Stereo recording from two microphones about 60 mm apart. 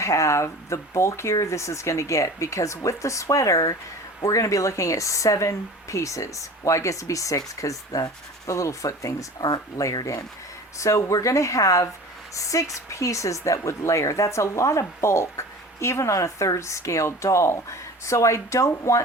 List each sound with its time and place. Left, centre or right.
0.0 s speech: left
9.7 s speech: left
10.8 s speech: left